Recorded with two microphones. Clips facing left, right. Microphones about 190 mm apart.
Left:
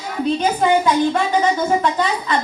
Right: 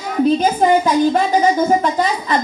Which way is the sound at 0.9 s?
35° right (ahead or behind).